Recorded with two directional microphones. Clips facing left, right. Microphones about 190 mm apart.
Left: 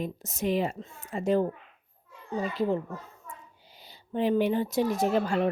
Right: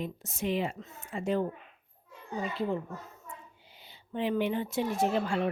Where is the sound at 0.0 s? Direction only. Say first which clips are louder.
Left 3 dB; 40° left (ahead or behind).